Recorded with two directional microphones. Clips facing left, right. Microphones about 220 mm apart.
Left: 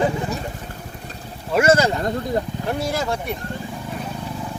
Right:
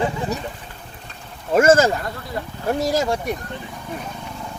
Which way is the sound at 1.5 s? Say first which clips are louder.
Right 2 dB; 45° right (ahead or behind).